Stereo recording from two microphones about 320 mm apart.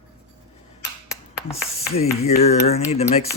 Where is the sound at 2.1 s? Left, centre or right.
Left.